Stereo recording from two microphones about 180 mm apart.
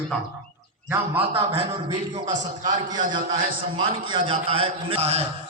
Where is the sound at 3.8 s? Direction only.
30° right (ahead or behind).